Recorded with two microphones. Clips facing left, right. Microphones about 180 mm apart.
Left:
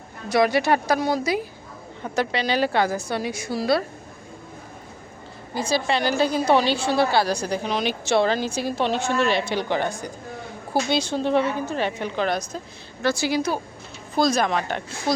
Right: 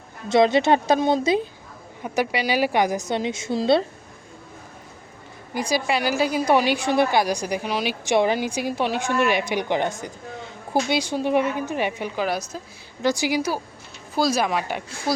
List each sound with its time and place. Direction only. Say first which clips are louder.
0.3 s a woman's voice: right 2 dB; 25° right (ahead or behind)
2.0 s a woman's voice: right 1 dB; 10° right (ahead or behind)
5.5 s a woman's voice: even; 15° right (ahead or behind)